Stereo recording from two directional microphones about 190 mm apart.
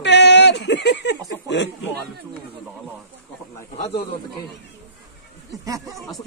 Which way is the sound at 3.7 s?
30° left (ahead or behind).